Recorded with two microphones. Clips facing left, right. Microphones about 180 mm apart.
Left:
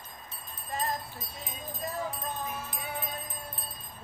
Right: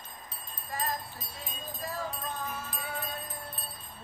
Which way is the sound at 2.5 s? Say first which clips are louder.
Left 1 dB; 20° left (ahead or behind).